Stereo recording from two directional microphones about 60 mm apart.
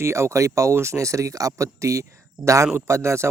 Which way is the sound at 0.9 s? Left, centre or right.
Right.